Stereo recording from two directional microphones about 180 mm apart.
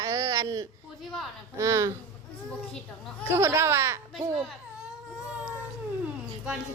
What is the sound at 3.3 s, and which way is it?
Speech, 15° right (ahead or behind).